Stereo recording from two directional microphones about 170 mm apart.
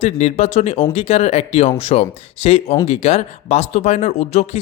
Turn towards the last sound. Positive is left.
turn(degrees=40)  # may be behind; listen again after turning